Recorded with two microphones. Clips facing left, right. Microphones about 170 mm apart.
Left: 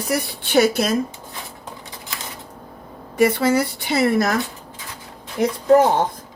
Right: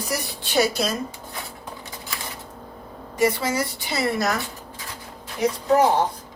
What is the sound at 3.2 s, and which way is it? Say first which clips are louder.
Speech: left 5 dB; 60° left (ahead or behind).